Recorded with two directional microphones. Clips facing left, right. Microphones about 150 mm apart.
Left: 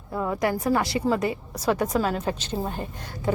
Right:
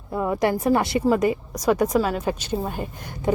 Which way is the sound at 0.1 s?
10° right (ahead or behind).